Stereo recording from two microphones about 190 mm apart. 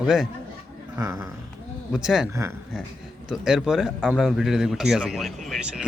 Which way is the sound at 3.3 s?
Centre (ahead or behind).